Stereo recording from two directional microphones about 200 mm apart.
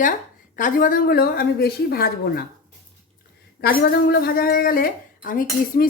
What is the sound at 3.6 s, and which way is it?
A woman's voice, 50° left (ahead or behind).